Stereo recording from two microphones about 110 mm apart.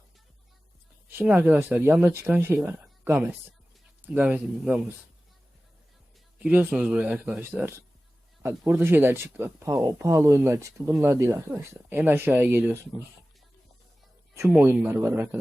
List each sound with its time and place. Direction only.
1.1 s a woman's voice: 20° right (ahead or behind)
6.4 s speech: 15° right (ahead or behind)
14.5 s speech: 15° right (ahead or behind)